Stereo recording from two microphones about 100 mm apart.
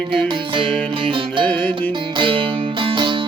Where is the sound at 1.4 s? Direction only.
15° left (ahead or behind).